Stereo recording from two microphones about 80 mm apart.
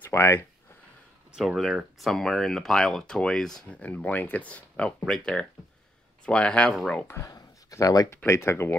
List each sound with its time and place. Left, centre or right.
0.1 s speech: left
1.3 s speech: centre
3.6 s speech: centre
7.2 s a sound: left
8.3 s speech: left